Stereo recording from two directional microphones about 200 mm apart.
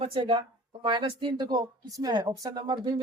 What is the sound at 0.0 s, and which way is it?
Speech, 30° right (ahead or behind).